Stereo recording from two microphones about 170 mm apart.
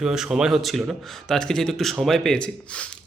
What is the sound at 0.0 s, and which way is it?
Speech, 5° right (ahead or behind).